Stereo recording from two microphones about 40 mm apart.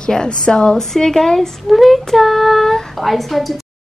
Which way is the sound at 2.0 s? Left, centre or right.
Centre.